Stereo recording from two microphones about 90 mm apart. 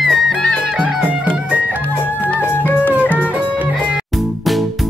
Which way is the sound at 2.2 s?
20° left (ahead or behind).